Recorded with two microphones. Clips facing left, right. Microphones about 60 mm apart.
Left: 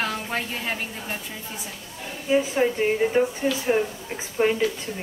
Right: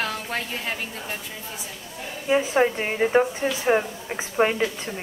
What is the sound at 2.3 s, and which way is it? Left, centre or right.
A woman's voice, right.